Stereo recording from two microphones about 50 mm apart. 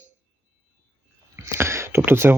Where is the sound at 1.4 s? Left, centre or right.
Right.